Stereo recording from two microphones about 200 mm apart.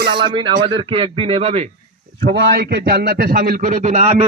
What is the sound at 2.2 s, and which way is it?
A man's voice, 55° right (ahead or behind).